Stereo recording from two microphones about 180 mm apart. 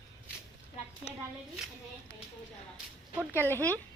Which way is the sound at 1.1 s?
35° left (ahead or behind).